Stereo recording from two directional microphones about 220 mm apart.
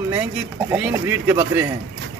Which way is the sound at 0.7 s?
10° right (ahead or behind).